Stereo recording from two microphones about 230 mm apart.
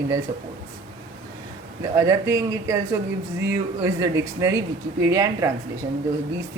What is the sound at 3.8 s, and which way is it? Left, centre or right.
A man's voice, centre.